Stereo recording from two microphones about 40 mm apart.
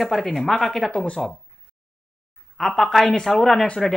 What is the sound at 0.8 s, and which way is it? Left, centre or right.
Speech, left.